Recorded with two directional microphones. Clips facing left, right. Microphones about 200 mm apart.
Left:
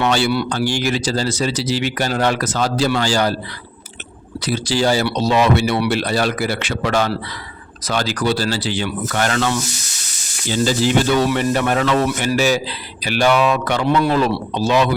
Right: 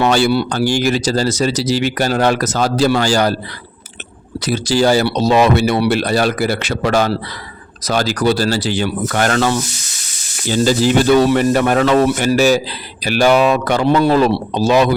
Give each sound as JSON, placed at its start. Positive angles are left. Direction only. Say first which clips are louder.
{"t": 0.0, "sound": "speech", "louder": "right 4 dB", "side_deg": -45}
{"t": 4.4, "sound": "speech", "louder": "right 4 dB", "side_deg": -45}